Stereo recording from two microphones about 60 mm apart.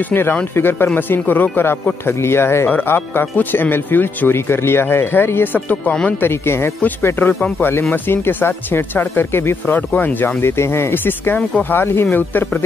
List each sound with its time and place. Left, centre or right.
0.1 s speech: left
2.0 s speech: left
6.2 s speech: left
7.3 s speech: centre
7.9 s speech: left
9.8 s speech: left
10.4 s speech: left